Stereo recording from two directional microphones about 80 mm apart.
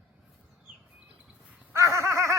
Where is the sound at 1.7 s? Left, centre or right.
Right.